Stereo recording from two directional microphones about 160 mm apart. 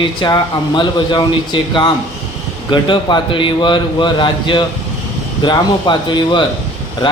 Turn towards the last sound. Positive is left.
turn(degrees=30)  # may be behind; listen again after turning